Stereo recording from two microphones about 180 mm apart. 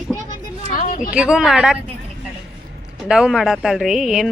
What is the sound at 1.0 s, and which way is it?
Speech, 5° right (ahead or behind).